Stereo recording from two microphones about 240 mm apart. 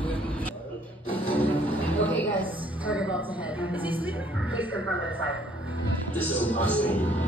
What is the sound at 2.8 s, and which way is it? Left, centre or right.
Music, centre.